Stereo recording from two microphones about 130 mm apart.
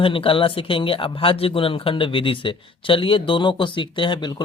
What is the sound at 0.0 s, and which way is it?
Speech, 40° left (ahead or behind).